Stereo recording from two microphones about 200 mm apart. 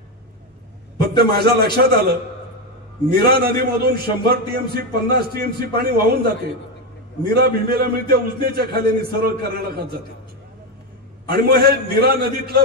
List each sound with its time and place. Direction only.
0.9 s a man's voice: 50° right (ahead or behind)
3.1 s a man's voice: 50° right (ahead or behind)
11.3 s a man's voice: 50° right (ahead or behind)